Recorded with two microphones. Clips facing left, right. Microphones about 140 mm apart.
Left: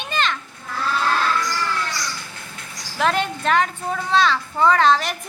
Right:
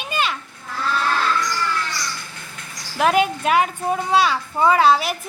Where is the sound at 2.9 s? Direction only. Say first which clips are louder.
Right 4 dB; 10° right (ahead or behind).